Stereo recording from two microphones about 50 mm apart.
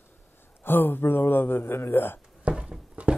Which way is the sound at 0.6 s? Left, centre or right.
Left.